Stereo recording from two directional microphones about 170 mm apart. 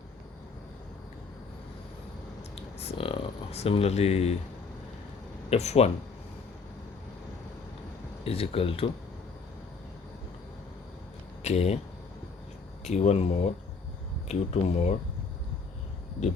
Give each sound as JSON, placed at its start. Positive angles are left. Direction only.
{"t": 2.6, "sound": "speech", "side_deg": 35}
{"t": 5.5, "sound": "speech", "side_deg": 40}
{"t": 8.2, "sound": "speech", "side_deg": 35}
{"t": 11.4, "sound": "speech", "side_deg": 40}
{"t": 12.9, "sound": "speech", "side_deg": 40}